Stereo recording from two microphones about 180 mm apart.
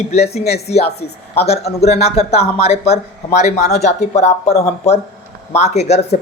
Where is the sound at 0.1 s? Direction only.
35° left (ahead or behind).